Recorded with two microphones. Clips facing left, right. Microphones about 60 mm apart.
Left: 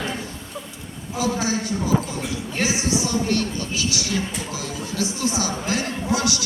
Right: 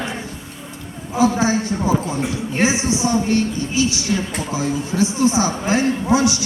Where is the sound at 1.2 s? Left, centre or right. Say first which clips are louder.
Right 7 dB; right.